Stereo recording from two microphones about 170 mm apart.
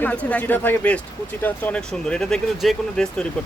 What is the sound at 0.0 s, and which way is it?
Speech, 10° left (ahead or behind).